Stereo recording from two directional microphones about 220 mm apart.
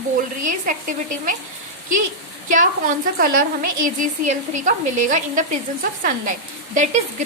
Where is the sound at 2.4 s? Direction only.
35° right (ahead or behind).